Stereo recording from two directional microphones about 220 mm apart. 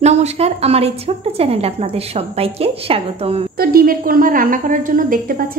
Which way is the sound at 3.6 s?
40° right (ahead or behind).